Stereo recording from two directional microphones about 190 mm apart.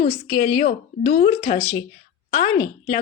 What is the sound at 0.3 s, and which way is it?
A woman's voice, 45° left (ahead or behind).